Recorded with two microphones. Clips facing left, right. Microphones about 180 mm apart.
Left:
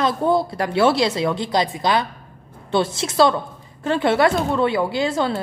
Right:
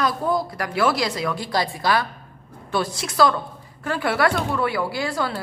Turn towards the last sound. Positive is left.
turn(degrees=25)  # may be behind; listen again after turning